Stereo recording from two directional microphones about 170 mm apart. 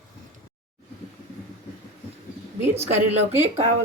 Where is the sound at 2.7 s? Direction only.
35° right (ahead or behind).